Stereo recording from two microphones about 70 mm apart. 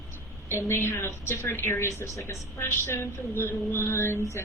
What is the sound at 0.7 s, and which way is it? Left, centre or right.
A woman's voice, left.